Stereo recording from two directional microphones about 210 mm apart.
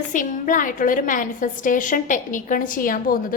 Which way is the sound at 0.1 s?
40° left (ahead or behind).